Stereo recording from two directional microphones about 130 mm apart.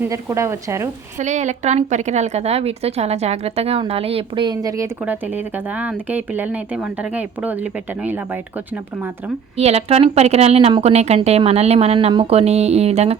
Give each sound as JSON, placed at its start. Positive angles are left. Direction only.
{"t": 0.0, "sound": "a woman's voice", "side_deg": -25}
{"t": 1.2, "sound": "a woman's voice", "side_deg": -65}
{"t": 5.0, "sound": "speech", "side_deg": -10}
{"t": 9.6, "sound": "a woman's voice", "side_deg": -50}
{"t": 11.9, "sound": "a woman's voice", "side_deg": -40}